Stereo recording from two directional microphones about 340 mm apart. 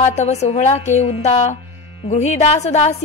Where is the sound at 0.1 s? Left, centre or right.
Centre.